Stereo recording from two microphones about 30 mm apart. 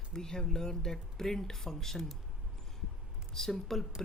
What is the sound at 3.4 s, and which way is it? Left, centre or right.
Speech, centre.